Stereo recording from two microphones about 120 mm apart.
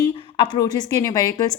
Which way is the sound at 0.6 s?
30° left (ahead or behind).